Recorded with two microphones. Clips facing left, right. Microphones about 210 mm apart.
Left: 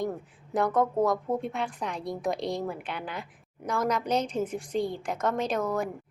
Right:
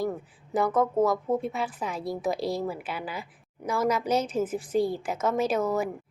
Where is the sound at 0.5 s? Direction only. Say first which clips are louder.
Right 1 dB; centre (ahead or behind).